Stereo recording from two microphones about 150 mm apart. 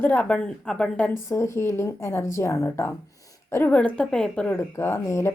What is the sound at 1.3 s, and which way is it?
A woman's voice, 20° left (ahead or behind).